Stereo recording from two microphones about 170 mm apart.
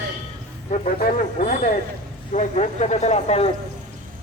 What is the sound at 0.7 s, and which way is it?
Speech, 45° left (ahead or behind).